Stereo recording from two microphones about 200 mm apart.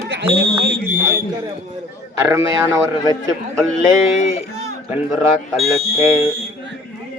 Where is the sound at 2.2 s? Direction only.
15° right (ahead or behind).